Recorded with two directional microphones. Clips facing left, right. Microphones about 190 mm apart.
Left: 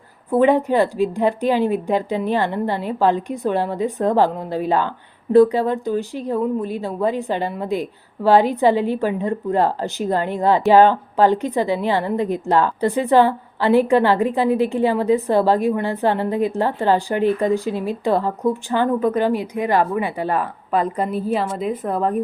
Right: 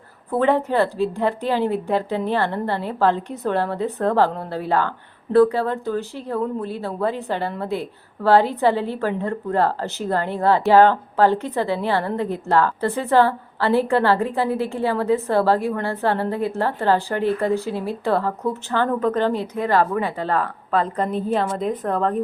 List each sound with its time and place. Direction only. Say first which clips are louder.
0.3 s a woman's voice: left 4 dB; 15° left (ahead or behind)